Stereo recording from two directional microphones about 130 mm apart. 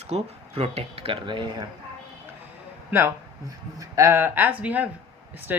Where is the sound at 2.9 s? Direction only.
15° right (ahead or behind).